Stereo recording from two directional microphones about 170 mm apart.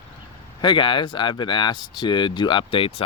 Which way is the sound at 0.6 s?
30° left (ahead or behind).